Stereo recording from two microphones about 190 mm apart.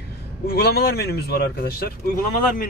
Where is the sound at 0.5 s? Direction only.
55° left (ahead or behind).